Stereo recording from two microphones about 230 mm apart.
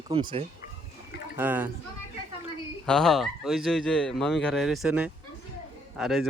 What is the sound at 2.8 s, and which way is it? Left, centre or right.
Speech, centre.